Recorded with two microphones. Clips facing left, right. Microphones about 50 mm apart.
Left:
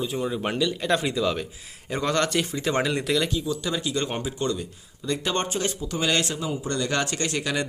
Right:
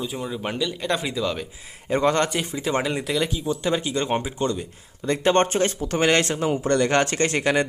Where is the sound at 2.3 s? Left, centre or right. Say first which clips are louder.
Even; centre.